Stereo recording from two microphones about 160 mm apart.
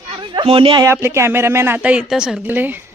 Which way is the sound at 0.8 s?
15° right (ahead or behind).